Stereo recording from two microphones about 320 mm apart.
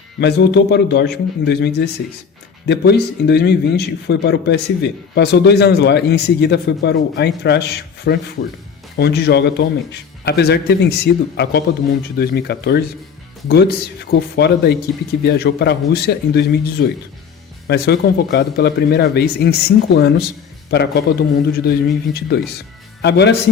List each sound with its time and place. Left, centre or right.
0.2 s speech: left